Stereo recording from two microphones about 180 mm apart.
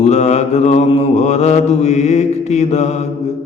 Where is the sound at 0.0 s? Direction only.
40° left (ahead or behind).